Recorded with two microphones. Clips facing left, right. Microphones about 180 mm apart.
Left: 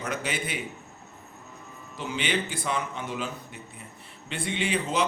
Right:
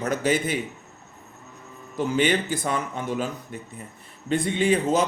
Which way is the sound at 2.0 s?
45° right (ahead or behind).